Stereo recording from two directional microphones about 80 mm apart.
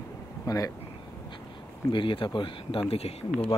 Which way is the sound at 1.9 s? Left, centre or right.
Left.